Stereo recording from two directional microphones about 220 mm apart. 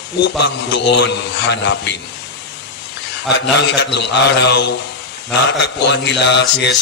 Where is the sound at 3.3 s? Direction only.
50° left (ahead or behind).